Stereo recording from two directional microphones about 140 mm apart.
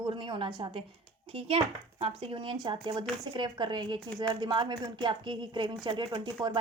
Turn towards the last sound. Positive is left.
turn(degrees=-30)  # may be behind; listen again after turning